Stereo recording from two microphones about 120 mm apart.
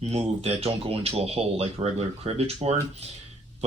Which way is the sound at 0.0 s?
60° right (ahead or behind).